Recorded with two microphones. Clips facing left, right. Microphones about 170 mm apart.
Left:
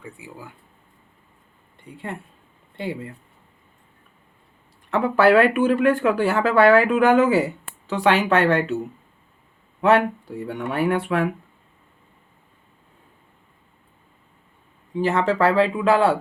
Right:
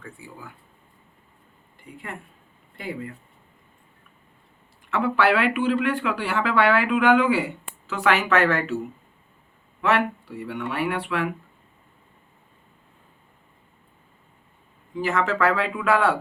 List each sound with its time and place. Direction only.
2.7 s speech: 25° left (ahead or behind)
4.9 s speech: 40° left (ahead or behind)
9.8 s speech: 40° left (ahead or behind)
15.0 s speech: 35° left (ahead or behind)